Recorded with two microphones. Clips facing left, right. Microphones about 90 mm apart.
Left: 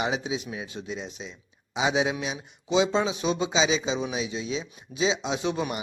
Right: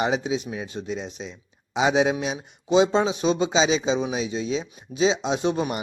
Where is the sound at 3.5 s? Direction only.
65° right (ahead or behind).